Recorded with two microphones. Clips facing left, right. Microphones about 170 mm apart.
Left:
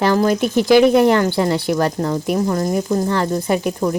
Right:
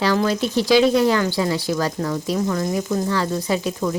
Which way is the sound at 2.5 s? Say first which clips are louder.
Left 3 dB; 40° left (ahead or behind).